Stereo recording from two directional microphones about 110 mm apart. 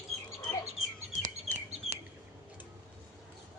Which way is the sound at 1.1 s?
90° left.